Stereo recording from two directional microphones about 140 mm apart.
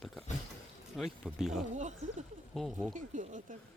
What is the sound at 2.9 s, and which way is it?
Speech, 60° right (ahead or behind).